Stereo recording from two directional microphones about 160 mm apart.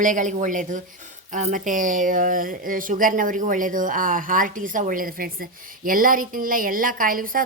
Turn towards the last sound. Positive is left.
turn(degrees=-60)  # may be behind; listen again after turning